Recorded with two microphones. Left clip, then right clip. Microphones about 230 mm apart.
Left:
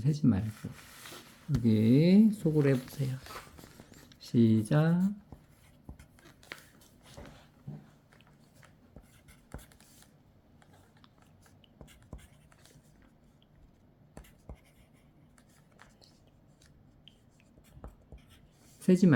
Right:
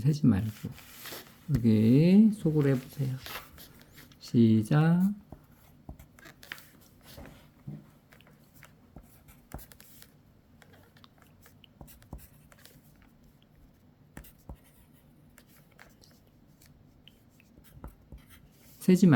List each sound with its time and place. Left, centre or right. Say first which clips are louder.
0.0 s speech: right 2 dB; centre
1.6 s speech: right 2 dB; centre
6.1 s writing: right 6 dB; right
18.8 s speech: right 2 dB; centre